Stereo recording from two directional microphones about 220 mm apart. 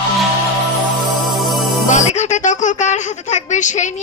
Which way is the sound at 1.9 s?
35° left (ahead or behind).